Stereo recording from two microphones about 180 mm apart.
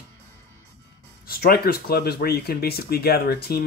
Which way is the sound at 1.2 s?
55° left (ahead or behind).